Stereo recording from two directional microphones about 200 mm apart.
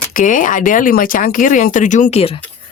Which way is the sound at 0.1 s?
40° left (ahead or behind).